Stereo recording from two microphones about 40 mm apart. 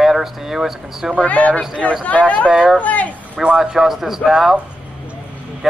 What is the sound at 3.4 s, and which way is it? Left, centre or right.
Speech, centre.